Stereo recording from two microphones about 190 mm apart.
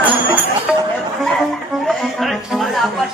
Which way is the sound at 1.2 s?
Centre (ahead or behind).